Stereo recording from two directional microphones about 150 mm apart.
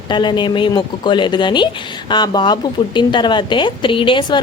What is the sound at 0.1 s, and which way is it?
A woman's voice, 30° left (ahead or behind).